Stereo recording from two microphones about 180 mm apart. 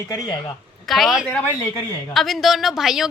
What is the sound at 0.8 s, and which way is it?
A woman's voice, centre (ahead or behind).